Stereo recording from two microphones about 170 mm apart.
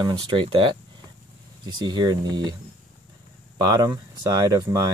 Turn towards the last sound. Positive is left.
turn(degrees=-20)  # may be behind; listen again after turning